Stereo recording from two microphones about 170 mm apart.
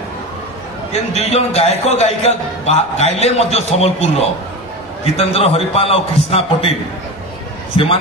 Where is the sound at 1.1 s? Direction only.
35° left (ahead or behind).